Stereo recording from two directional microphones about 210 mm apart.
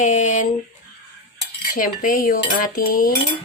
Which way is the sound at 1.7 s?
40° left (ahead or behind).